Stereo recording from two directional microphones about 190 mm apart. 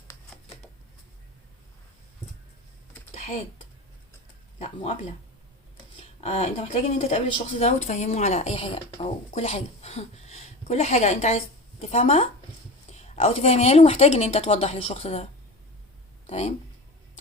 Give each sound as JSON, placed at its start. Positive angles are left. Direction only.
{"t": 3.2, "sound": "computer keyboard", "side_deg": 35}
{"t": 4.6, "sound": "speech", "side_deg": 35}